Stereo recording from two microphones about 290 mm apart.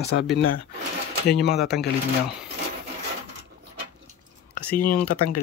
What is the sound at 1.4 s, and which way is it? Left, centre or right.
Speech, left.